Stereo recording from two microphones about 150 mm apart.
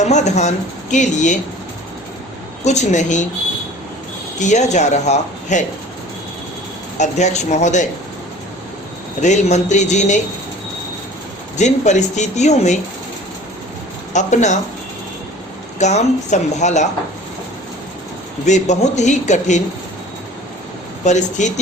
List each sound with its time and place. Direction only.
0.0 s speech: 50° left (ahead or behind)
2.6 s speech: 50° left (ahead or behind)
4.4 s speech: 55° left (ahead or behind)
7.0 s speech: 50° left (ahead or behind)
9.2 s speech: 50° left (ahead or behind)
11.5 s speech: 50° left (ahead or behind)
14.1 s speech: 55° left (ahead or behind)
15.8 s speech: 50° left (ahead or behind)
18.4 s speech: 50° left (ahead or behind)
21.0 s speech: 55° left (ahead or behind)